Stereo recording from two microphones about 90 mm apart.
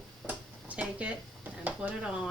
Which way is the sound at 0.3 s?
15° right (ahead or behind).